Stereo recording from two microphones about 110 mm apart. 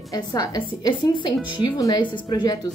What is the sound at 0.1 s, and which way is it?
A woman's voice, 35° left (ahead or behind).